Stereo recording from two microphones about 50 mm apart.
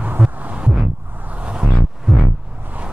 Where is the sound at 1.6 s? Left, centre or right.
Centre.